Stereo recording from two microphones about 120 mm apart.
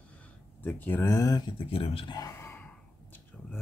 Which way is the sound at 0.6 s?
15° left (ahead or behind).